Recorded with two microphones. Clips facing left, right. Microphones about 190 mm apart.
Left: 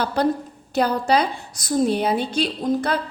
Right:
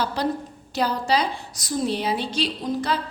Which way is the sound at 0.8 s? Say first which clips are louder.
Left 4 dB; 55° left (ahead or behind).